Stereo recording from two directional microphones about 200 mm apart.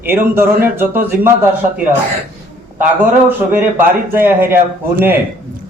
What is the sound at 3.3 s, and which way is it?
A man's voice, 10° right (ahead or behind).